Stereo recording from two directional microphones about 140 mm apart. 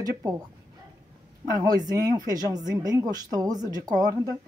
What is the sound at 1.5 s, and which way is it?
A woman's voice, 25° right (ahead or behind).